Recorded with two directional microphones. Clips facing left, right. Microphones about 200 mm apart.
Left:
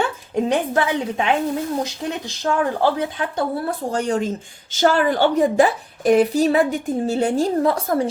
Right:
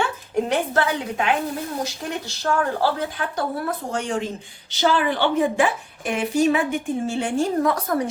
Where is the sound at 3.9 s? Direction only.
40° left (ahead or behind).